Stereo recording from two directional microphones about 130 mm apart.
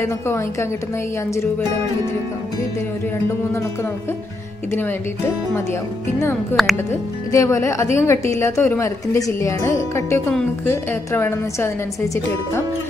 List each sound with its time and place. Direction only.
0.0 s a woman's voice: 20° left (ahead or behind)
4.7 s a woman's voice: 15° left (ahead or behind)
6.5 s speech: centre (ahead or behind)
6.9 s a woman's voice: 20° left (ahead or behind)